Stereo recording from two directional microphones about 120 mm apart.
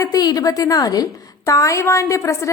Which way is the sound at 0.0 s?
30° left (ahead or behind).